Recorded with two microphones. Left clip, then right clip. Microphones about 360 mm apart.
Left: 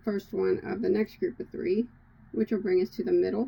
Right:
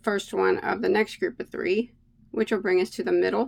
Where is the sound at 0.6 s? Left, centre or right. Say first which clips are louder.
Right 5 dB; right.